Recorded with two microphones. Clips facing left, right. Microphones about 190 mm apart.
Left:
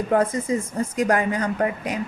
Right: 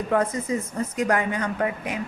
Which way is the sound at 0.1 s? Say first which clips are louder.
Left 2 dB; 30° left (ahead or behind).